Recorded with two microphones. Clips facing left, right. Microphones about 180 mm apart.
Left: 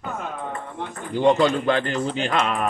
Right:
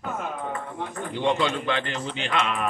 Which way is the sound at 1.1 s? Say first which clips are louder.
Left 7 dB; 40° left (ahead or behind).